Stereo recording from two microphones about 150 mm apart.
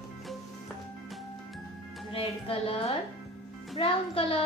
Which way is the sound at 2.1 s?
40° left (ahead or behind).